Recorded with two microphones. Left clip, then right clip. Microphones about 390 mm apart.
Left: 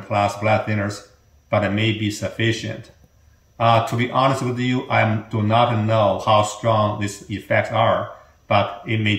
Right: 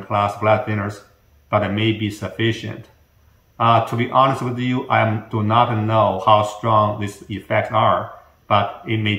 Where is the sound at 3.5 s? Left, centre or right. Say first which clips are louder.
Right 1 dB; centre.